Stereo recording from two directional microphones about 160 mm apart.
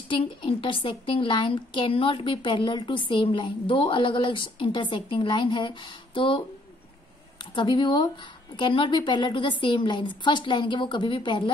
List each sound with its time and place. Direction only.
0.1 s a woman's voice: 35° left (ahead or behind)
7.5 s a woman's voice: 30° left (ahead or behind)